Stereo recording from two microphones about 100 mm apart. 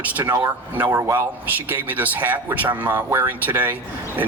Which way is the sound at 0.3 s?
25° right (ahead or behind).